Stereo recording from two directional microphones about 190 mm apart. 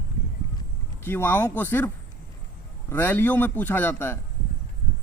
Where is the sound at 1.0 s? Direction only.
10° left (ahead or behind).